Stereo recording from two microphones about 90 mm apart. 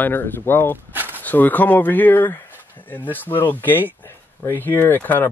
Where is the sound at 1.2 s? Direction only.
20° left (ahead or behind).